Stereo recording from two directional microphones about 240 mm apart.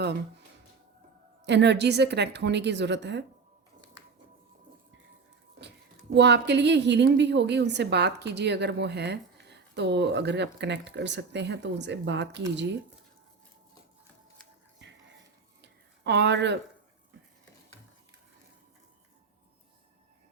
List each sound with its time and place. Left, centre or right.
0.0 s speech: right
1.5 s a woman's voice: right
6.1 s a woman's voice: right
15.6 s a sound: right